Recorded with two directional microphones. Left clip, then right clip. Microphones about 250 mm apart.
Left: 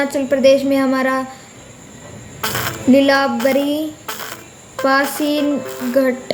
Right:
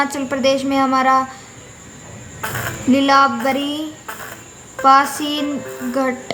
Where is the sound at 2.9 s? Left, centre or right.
Centre.